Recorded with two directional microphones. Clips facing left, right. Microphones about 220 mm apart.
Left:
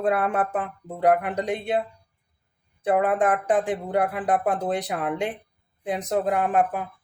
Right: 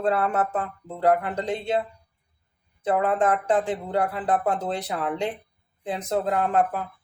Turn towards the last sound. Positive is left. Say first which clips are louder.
# even
turn(degrees=15)  # may be behind; listen again after turning